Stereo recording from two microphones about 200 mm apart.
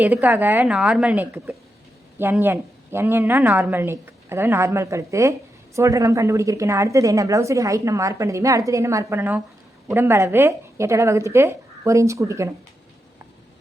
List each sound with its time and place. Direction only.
0.0 s a woman's voice: 10° right (ahead or behind)